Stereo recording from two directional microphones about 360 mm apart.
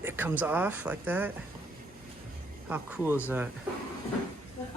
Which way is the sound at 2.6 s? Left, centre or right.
Centre.